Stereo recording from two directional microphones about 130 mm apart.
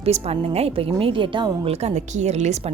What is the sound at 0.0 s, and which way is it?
Speech, 50° right (ahead or behind).